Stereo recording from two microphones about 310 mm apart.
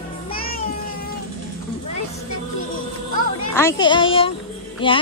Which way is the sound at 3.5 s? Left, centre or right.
Centre.